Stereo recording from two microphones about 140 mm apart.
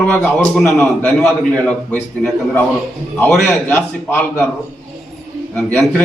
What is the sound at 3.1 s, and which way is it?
A man's voice, 10° left (ahead or behind).